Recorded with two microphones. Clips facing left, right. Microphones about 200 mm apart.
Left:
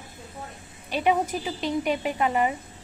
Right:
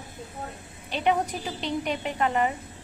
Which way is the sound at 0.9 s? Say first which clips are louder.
Left 2 dB; 10° left (ahead or behind).